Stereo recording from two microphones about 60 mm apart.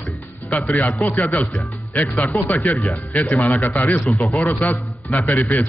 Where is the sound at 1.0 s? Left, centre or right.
Left.